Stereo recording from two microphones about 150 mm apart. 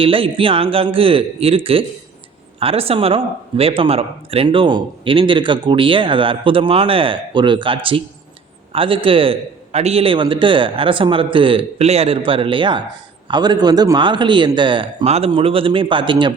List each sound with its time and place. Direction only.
0.0 s a man's voice: 35° right (ahead or behind)